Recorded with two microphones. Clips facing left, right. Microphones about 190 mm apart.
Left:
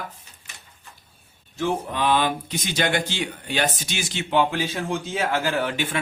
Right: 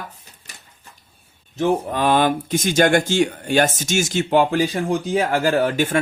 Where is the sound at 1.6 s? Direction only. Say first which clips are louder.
Right 5 dB; 45° right (ahead or behind).